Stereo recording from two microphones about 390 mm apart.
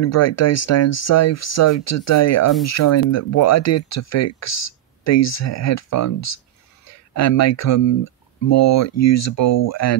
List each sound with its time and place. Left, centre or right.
0.0 s speech: left